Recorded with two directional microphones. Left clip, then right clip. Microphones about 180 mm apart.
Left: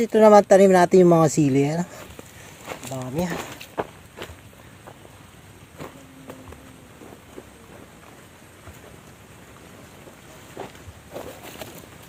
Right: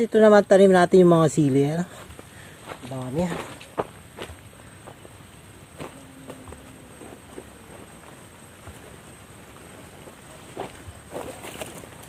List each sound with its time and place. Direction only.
0.0 s speech: 20° left (ahead or behind)
2.9 s speech: 10° left (ahead or behind)
5.8 s walk: 10° right (ahead or behind)
10.6 s walk: 25° right (ahead or behind)
11.1 s a sound: 45° right (ahead or behind)